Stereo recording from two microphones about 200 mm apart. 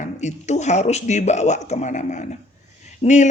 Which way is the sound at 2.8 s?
35° left (ahead or behind).